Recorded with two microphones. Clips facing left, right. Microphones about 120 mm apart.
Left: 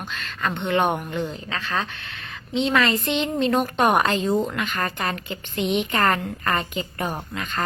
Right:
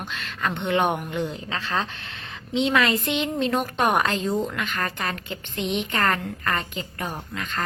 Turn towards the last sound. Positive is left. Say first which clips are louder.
# left 2 dB
turn(degrees=10)  # may be behind; listen again after turning